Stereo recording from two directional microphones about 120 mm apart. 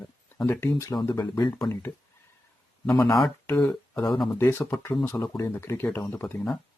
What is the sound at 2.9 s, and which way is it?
Speech, 25° left (ahead or behind).